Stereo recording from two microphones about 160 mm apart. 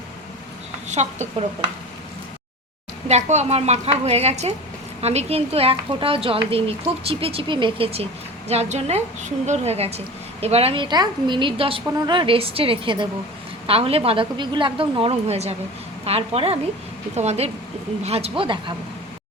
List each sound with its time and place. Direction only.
0.9 s speech: 45° right (ahead or behind)
3.1 s a woman's voice: 45° right (ahead or behind)